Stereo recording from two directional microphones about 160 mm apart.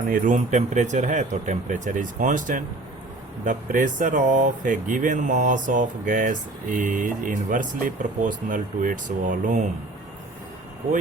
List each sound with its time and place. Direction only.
0.1 s speech: 55° right (ahead or behind)